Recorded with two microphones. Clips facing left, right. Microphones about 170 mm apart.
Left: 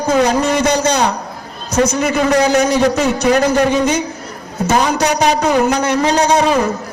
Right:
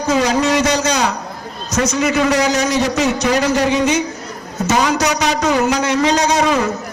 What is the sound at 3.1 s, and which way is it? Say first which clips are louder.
Speech: left 3 dB; 55° left (ahead or behind).